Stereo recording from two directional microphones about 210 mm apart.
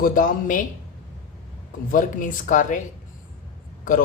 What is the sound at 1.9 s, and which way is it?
Speech, 40° left (ahead or behind).